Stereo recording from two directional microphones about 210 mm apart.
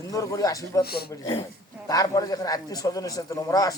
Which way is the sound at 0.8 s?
50° left (ahead or behind).